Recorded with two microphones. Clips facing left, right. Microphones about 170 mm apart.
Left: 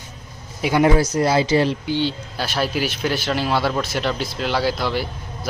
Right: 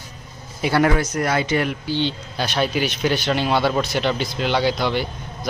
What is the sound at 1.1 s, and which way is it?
Speech, 30° left (ahead or behind).